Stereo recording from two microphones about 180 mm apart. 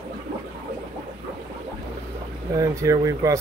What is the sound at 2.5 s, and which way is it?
Speech, 20° right (ahead or behind).